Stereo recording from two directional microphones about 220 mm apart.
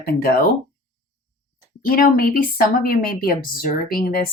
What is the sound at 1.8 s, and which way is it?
A woman's voice, 40° left (ahead or behind).